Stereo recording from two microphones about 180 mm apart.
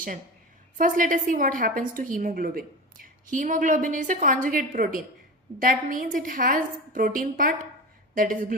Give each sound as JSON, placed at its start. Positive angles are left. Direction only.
{"t": 0.8, "sound": "a woman's voice", "side_deg": -45}